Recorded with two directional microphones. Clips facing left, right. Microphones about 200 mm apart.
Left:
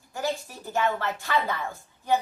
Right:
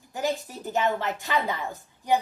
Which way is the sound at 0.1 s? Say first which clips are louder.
Right 2 dB; 15° right (ahead or behind).